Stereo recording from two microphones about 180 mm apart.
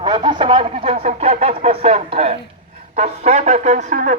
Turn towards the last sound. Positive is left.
turn(degrees=-45)  # may be behind; listen again after turning